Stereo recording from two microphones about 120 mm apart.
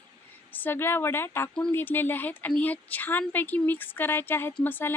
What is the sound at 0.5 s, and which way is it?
A woman's voice, 15° left (ahead or behind).